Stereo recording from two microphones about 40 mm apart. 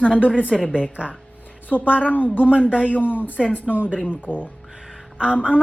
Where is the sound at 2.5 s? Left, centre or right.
Right.